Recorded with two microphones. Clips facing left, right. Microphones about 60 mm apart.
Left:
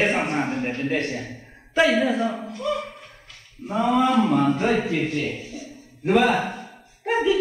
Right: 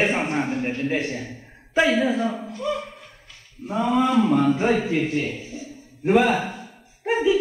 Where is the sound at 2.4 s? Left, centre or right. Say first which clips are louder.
Left 1 dB; centre.